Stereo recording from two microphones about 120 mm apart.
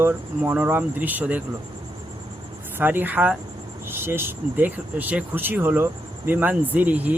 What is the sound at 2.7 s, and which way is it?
Speech, 15° right (ahead or behind).